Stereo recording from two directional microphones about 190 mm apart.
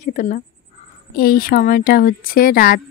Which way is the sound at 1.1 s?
50° left (ahead or behind).